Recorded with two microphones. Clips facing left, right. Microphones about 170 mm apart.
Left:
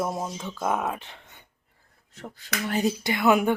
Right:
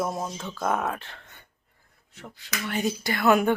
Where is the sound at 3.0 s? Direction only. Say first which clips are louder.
Right 1 dB; 15° left (ahead or behind).